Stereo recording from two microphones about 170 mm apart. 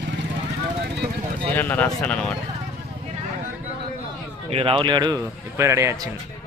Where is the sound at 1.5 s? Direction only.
10° left (ahead or behind).